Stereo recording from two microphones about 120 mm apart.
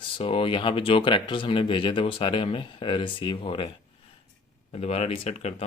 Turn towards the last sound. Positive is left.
turn(degrees=65)  # may be behind; listen again after turning